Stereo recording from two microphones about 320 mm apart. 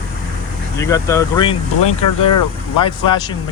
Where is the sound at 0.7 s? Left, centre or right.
Centre.